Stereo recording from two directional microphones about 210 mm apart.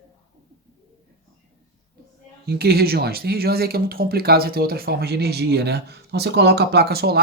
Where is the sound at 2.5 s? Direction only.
50° right (ahead or behind).